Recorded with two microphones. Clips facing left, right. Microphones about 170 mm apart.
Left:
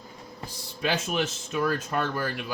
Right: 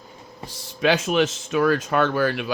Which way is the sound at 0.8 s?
85° right.